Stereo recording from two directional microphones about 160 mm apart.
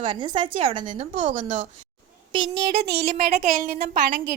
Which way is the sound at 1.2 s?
50° right (ahead or behind).